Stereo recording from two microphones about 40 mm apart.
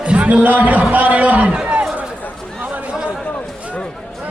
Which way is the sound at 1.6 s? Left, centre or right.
Right.